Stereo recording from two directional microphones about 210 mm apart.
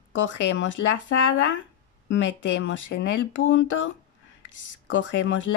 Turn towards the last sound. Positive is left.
turn(degrees=65)  # may be behind; listen again after turning